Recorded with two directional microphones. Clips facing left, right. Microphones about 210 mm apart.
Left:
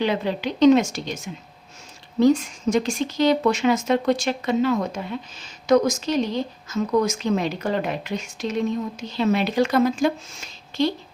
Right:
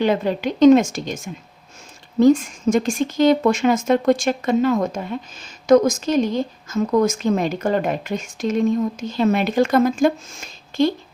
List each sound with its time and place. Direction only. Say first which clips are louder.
0.0 s speech: right 4 dB; 45° right (ahead or behind)